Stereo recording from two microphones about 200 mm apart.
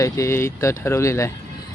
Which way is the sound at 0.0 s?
15° left (ahead or behind).